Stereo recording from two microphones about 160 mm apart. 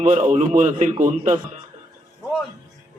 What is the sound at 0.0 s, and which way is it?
Speech, 50° right (ahead or behind).